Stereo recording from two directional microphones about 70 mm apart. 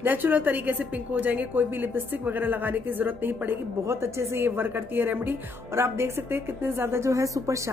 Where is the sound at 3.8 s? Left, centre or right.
Right.